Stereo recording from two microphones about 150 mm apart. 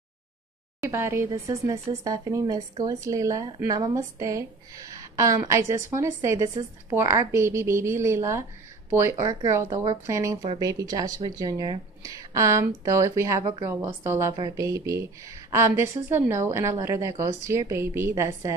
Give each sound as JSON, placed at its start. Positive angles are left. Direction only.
{"t": 0.8, "sound": "a woman's voice", "side_deg": -15}